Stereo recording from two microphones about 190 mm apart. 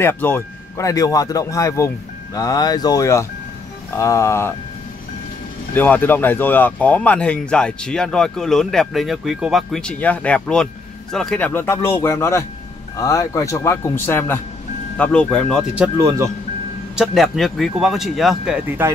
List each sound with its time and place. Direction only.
0.0 s speech: 10° left (ahead or behind)
5.8 s speech: 10° left (ahead or behind)
16.9 s speech: centre (ahead or behind)